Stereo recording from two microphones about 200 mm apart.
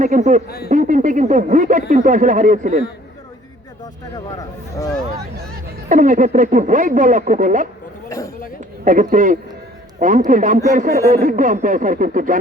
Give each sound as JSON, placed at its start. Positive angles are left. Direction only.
{"t": 0.0, "sound": "a man's voice", "side_deg": -40}
{"t": 0.4, "sound": "a man's voice", "side_deg": 50}
{"t": 0.7, "sound": "a man's voice", "side_deg": -40}
{"t": 4.4, "sound": "a sound", "side_deg": 15}
{"t": 5.9, "sound": "a man's voice", "side_deg": -40}
{"t": 8.8, "sound": "a man's voice", "side_deg": -40}